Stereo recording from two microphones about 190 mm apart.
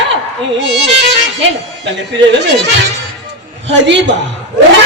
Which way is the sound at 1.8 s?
70° right (ahead or behind).